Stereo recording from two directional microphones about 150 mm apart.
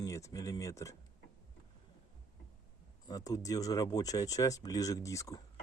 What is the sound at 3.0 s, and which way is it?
Speech, 25° left (ahead or behind).